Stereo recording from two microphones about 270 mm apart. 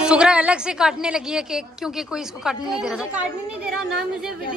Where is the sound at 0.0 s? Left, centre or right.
Centre.